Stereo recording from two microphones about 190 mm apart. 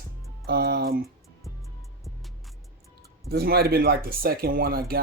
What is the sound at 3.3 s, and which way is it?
Speech, 55° right (ahead or behind).